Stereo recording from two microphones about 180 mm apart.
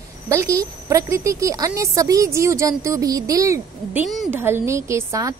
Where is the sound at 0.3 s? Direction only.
15° right (ahead or behind).